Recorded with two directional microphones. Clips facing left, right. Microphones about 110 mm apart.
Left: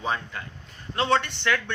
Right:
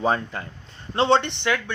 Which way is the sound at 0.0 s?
35° right (ahead or behind).